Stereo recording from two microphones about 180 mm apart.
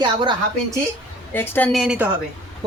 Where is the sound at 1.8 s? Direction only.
5° right (ahead or behind).